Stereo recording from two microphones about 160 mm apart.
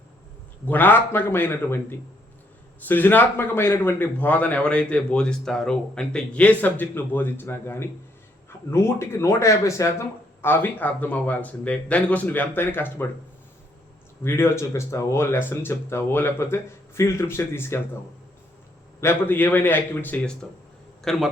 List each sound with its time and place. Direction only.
0.7 s a man's voice: 10° left (ahead or behind)
14.3 s a man's voice: 15° left (ahead or behind)
18.9 s a man's voice: 15° left (ahead or behind)